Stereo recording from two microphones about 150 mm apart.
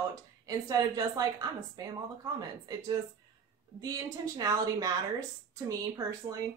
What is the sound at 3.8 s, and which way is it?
Speech, 25° right (ahead or behind).